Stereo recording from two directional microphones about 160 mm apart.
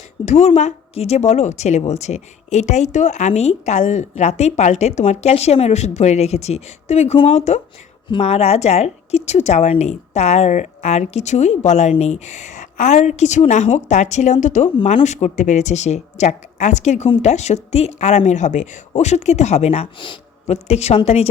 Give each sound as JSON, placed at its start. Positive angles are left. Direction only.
{"t": 0.3, "sound": "speech", "side_deg": 45}